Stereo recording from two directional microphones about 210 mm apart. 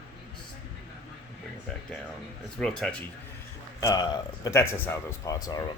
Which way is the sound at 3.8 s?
20° left (ahead or behind).